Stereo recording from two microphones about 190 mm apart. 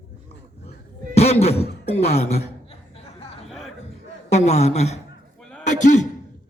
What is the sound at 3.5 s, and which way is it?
Music, centre (ahead or behind).